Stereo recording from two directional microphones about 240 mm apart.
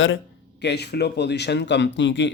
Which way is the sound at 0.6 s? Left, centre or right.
Left.